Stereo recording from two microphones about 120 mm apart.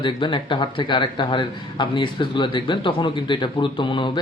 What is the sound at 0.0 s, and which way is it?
A man's voice, 40° left (ahead or behind).